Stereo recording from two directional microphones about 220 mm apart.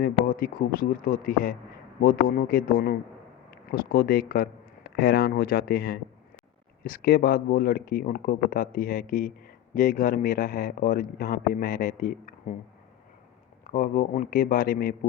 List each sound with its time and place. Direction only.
0.0 s speech: 40° left (ahead or behind)
13.7 s speech: 40° left (ahead or behind)